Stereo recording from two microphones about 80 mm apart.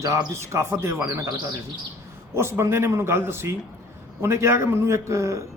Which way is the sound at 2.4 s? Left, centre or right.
Right.